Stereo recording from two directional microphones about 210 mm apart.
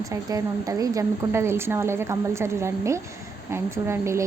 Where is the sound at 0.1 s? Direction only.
15° right (ahead or behind).